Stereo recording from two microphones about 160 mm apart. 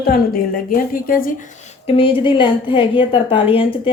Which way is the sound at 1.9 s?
35° left (ahead or behind).